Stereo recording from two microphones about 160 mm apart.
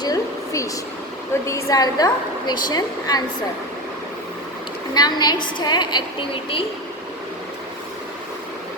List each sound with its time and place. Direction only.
0.0 s a sound: 20° left (ahead or behind)
1.5 s a woman's voice: 20° left (ahead or behind)
4.9 s a woman's voice: 25° left (ahead or behind)